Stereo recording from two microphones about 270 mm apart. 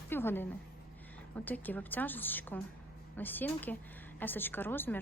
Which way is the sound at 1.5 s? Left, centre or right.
Centre.